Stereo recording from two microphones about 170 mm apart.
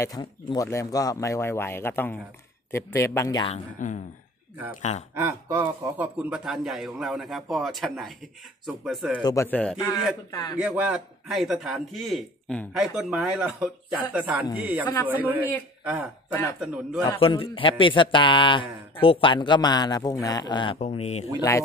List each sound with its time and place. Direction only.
0.0 s a man's voice: 25° left (ahead or behind)
5.1 s speech: 20° right (ahead or behind)
5.9 s a man's voice: 10° right (ahead or behind)
9.1 s speech: 20° left (ahead or behind)
10.3 s a man's voice: 20° left (ahead or behind)
10.6 s a man's voice: 5° right (ahead or behind)
17.0 s a man's voice: 30° left (ahead or behind)
20.8 s speech: 40° left (ahead or behind)
21.4 s speech: 15° left (ahead or behind)